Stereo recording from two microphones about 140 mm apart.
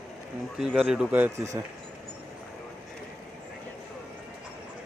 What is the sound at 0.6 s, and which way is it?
Speech, 5° right (ahead or behind).